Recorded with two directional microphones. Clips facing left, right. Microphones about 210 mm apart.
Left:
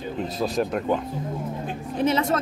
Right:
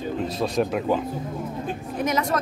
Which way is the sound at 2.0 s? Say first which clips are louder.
Left 3 dB; 30° left (ahead or behind).